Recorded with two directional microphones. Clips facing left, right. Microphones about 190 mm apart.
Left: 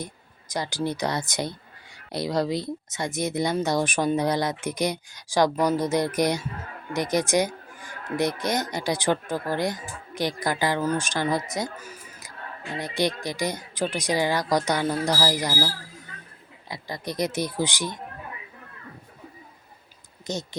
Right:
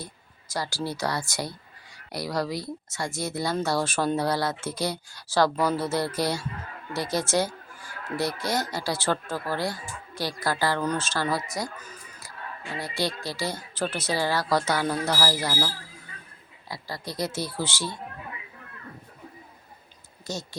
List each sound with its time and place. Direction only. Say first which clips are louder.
0.0 s speech: left 5 dB; 20° left (ahead or behind)
12.8 s speech: left 4 dB; 20° left (ahead or behind)
20.2 s speech: left 3 dB; 20° left (ahead or behind)